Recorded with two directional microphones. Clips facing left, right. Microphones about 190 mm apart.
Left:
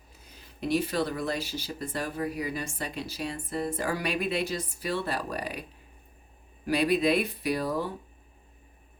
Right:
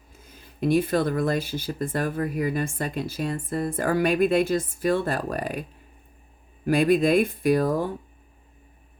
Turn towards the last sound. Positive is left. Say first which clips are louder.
# right 7 dB
turn(degrees=-50)  # may be behind; listen again after turning